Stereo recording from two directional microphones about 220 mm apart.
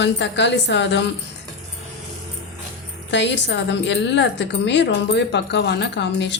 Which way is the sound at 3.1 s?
55° left (ahead or behind).